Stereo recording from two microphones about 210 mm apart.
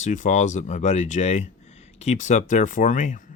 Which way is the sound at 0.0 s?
35° left (ahead or behind).